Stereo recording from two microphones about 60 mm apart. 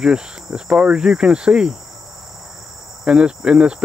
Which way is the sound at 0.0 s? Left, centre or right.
Centre.